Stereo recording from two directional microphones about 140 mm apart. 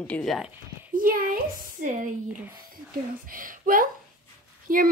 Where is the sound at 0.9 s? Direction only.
85° right.